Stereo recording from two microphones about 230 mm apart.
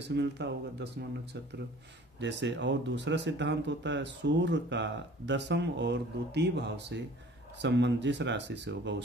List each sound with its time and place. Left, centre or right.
0.1 s speech: right
2.1 s speech: right